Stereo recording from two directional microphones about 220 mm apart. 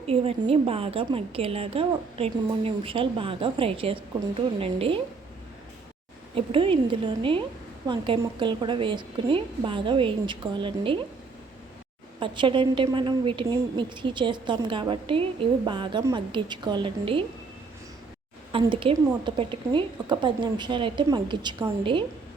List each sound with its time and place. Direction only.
0.1 s a woman's voice: 25° right (ahead or behind)
6.3 s a woman's voice: 25° right (ahead or behind)
12.2 s a woman's voice: 20° right (ahead or behind)
18.5 s a woman's voice: 25° right (ahead or behind)